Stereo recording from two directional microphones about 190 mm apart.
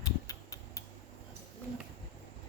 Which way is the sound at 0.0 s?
20° left (ahead or behind).